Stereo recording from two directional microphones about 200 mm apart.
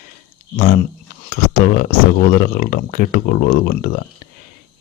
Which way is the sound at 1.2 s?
45° left (ahead or behind).